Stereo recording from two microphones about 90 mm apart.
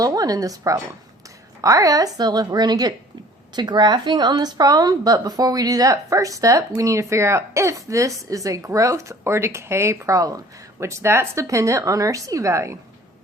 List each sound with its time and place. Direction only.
0.0 s a woman's voice: 40° right (ahead or behind)